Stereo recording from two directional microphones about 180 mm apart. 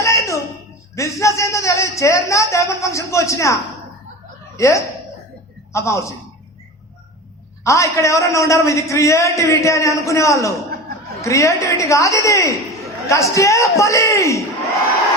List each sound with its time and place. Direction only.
0.0 s a sound: 15° left (ahead or behind)
0.9 s a man's voice: 15° left (ahead or behind)
7.6 s a man's voice: 15° left (ahead or behind)